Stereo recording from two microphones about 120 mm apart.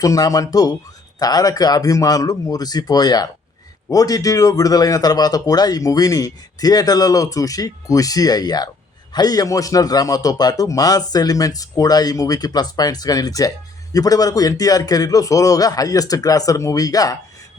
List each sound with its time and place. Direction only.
0.0 s a man's voice: 30° left (ahead or behind)